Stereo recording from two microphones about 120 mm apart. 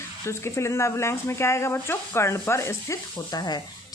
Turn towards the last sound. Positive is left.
turn(degrees=35)  # may be behind; listen again after turning